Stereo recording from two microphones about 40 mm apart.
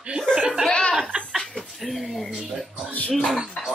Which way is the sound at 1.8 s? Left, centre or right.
Centre.